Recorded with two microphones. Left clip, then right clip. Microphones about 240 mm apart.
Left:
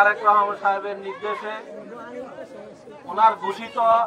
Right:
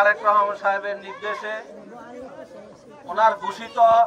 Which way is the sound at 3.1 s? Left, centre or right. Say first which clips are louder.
Left 1 dB; right.